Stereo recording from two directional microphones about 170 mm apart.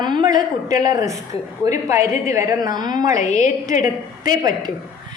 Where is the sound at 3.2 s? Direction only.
45° left (ahead or behind).